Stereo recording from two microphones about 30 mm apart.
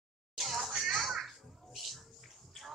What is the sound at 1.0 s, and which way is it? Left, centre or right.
Children playing, centre.